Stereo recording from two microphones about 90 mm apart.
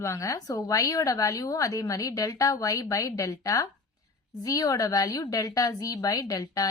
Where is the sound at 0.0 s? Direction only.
35° left (ahead or behind).